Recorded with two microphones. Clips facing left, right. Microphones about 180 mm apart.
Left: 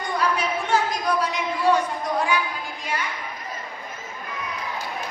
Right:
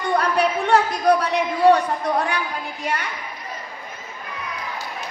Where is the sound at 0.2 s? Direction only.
65° right (ahead or behind).